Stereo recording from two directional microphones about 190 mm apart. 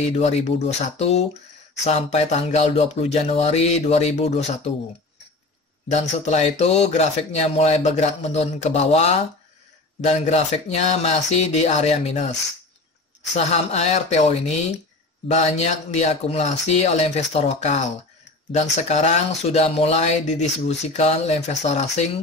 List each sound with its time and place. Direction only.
0.1 s speech: 35° left (ahead or behind)
5.9 s speech: 35° left (ahead or behind)
13.4 s speech: 35° left (ahead or behind)